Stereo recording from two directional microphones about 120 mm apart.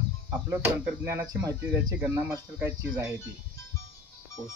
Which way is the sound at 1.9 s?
15° right (ahead or behind).